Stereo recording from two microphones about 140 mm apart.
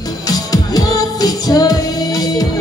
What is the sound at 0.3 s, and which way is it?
Music, 25° left (ahead or behind).